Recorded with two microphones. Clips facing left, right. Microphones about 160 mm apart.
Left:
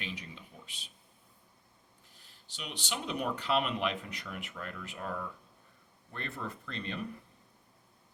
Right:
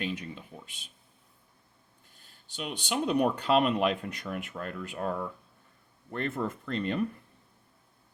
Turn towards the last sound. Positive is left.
turn(degrees=-50)  # may be behind; listen again after turning